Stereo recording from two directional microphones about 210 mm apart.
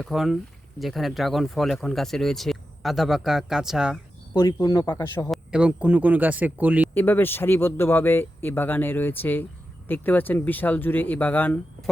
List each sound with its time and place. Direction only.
0.0 s speech: centre (ahead or behind)
4.4 s speech: 15° left (ahead or behind)
5.3 s speech: 5° right (ahead or behind)
6.9 s speech: 10° left (ahead or behind)